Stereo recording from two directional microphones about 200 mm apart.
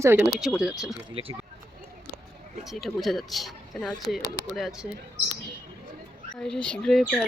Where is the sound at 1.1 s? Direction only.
25° right (ahead or behind).